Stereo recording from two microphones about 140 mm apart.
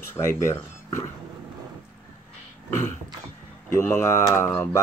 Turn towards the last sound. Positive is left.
turn(degrees=15)  # may be behind; listen again after turning